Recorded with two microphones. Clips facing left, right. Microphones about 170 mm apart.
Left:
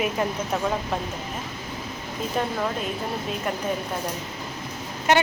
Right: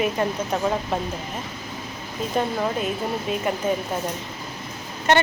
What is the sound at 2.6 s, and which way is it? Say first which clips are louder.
Speech: right 3 dB; 5° right (ahead or behind).